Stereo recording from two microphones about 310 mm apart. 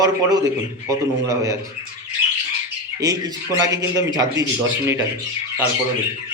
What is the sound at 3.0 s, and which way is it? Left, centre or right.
Speech, centre.